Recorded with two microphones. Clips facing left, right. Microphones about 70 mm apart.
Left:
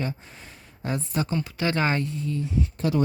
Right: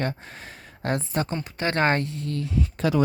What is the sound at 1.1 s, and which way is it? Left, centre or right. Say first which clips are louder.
Speech: even; right.